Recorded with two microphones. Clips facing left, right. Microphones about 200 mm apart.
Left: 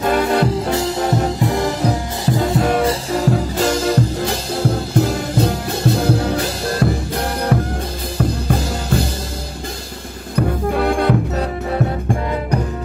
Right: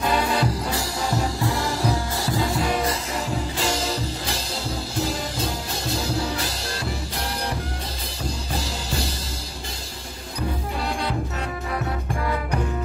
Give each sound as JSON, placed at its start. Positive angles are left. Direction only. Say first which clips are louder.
{"t": 0.0, "sound": "music", "louder": "left 7 dB", "side_deg": 55}
{"t": 0.7, "sound": "music", "louder": "left 8 dB", "side_deg": 20}
{"t": 2.6, "sound": "music", "louder": "left 7 dB", "side_deg": 50}
{"t": 10.3, "sound": "music", "louder": "left 10 dB", "side_deg": 60}